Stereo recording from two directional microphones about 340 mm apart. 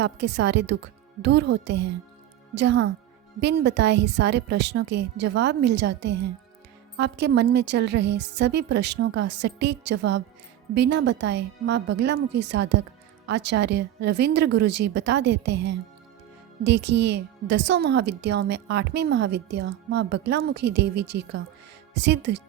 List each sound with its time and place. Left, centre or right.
0.0 s a woman's voice: right